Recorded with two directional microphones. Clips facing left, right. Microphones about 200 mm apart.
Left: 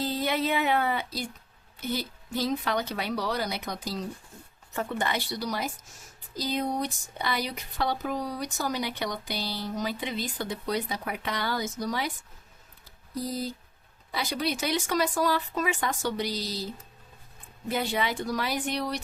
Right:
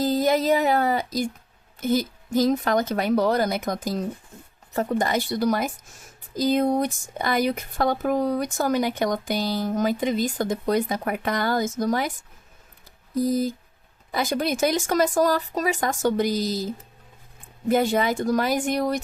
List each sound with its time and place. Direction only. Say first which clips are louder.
0.0 s speech: right 7 dB; 45° right (ahead or behind)
4.7 s speech: right 7 dB; 40° right (ahead or behind)
13.1 s speech: right 9 dB; 50° right (ahead or behind)